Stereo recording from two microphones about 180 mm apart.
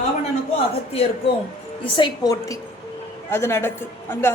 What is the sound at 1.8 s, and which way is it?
Speech, 30° left (ahead or behind).